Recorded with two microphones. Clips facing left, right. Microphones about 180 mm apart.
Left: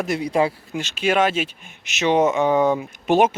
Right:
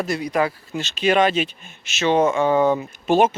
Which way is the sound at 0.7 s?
10° left (ahead or behind).